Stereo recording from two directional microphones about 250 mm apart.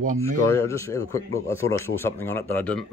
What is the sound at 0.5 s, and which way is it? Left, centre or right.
Speech, centre.